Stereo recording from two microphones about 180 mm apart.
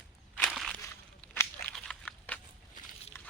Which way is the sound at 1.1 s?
15° left (ahead or behind).